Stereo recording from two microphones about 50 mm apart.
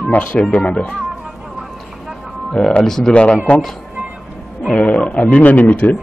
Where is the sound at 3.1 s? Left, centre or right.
Left.